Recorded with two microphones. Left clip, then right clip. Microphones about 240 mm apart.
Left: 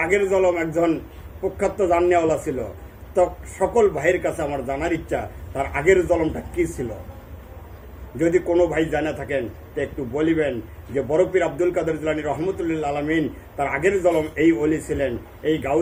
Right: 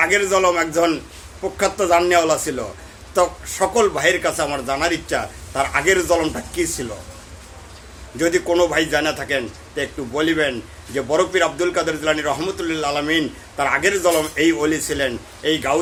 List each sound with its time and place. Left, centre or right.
0.0 s a man's voice: centre
8.2 s a man's voice: centre